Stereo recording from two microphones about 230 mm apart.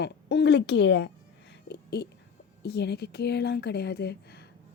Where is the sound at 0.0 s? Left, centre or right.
Left.